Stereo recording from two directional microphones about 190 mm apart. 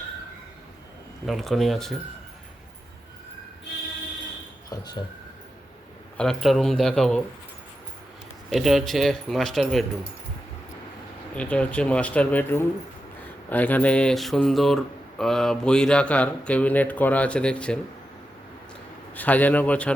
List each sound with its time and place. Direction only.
1.3 s a man's voice: centre (ahead or behind)
4.7 s speech: 20° left (ahead or behind)
6.1 s a man's voice: centre (ahead or behind)
8.4 s a man's voice: centre (ahead or behind)
11.3 s a man's voice: 5° left (ahead or behind)
19.1 s speech: 10° left (ahead or behind)